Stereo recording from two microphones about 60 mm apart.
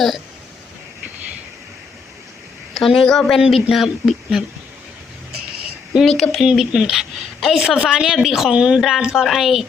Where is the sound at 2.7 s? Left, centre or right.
Centre.